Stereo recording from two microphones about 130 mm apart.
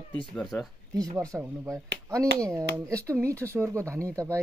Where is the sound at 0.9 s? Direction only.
30° right (ahead or behind).